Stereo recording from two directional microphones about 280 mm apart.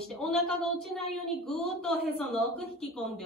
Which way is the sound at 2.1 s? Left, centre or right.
Left.